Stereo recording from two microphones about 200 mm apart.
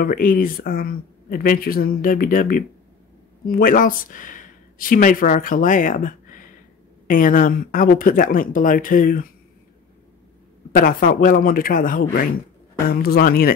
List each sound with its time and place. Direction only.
0.0 s speech: 45° left (ahead or behind)
10.8 s speech: 45° left (ahead or behind)